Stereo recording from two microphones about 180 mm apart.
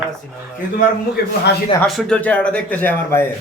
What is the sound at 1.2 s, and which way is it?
Speech, 60° left (ahead or behind).